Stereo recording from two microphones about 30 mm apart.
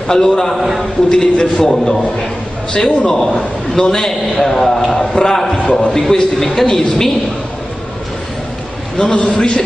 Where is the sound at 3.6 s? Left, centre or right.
Centre.